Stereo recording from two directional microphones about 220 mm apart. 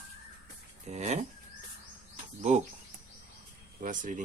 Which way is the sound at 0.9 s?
30° right (ahead or behind).